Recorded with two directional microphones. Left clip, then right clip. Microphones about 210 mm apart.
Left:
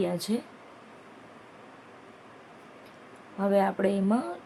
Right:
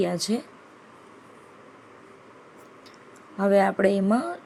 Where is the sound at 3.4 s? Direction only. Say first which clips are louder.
Right 5 dB; 15° right (ahead or behind).